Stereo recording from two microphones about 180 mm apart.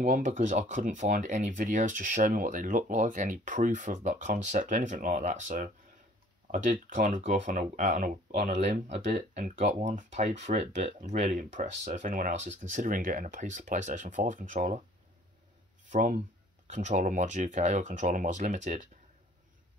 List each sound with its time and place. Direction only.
0.0 s speech: 45° right (ahead or behind)
15.9 s speech: 45° right (ahead or behind)